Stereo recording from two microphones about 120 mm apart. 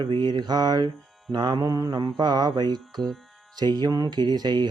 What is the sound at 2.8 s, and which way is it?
Music, centre (ahead or behind).